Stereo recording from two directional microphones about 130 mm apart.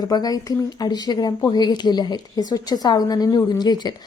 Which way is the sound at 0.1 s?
30° left (ahead or behind).